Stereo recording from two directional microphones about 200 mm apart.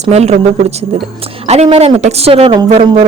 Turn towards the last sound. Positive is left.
turn(degrees=-30)  # may be behind; listen again after turning